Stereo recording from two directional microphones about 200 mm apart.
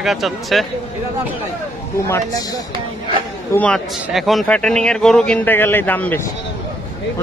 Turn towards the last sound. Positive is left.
turn(degrees=10)  # may be behind; listen again after turning